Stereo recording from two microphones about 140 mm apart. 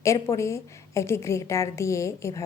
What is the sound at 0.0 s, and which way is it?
A woman's voice, 20° left (ahead or behind).